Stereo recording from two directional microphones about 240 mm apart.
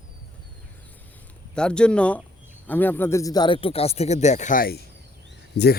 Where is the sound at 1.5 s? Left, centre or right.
Centre.